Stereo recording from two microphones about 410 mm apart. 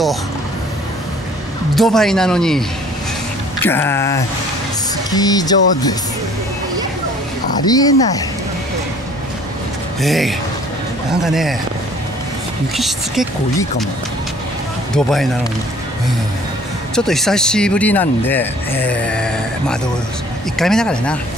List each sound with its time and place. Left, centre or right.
1.8 s speech: centre
3.6 s speech: centre
7.6 s speech: centre
9.9 s speech: centre
12.7 s speech: centre
15.0 s speech: centre
16.9 s speech: centre